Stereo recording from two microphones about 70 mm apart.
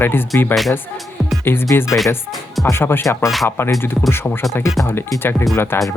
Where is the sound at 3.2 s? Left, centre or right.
Centre.